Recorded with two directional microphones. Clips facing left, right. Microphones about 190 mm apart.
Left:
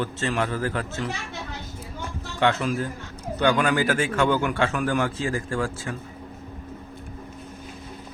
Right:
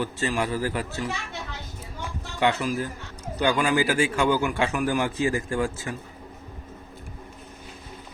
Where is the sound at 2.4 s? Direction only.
10° right (ahead or behind).